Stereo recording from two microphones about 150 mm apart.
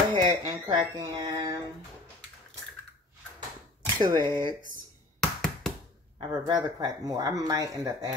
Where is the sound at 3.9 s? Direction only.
30° right (ahead or behind).